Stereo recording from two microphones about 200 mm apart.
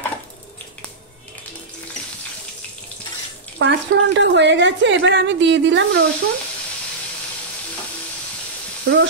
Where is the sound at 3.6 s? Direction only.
60° right (ahead or behind).